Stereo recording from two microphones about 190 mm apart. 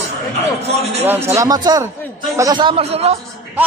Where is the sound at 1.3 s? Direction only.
20° right (ahead or behind).